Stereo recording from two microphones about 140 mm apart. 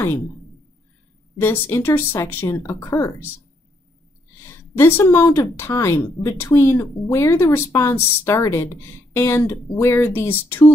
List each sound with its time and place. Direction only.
1.4 s speech: 15° left (ahead or behind)
4.5 s speech: 15° left (ahead or behind)